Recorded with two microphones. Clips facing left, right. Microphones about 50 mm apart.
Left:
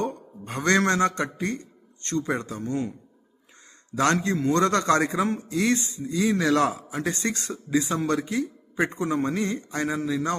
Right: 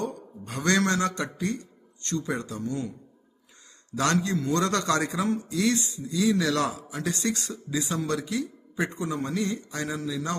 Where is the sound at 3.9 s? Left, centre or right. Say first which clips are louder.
Left 2 dB; left.